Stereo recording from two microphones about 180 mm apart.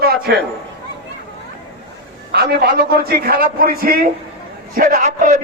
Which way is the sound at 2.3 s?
65° right (ahead or behind).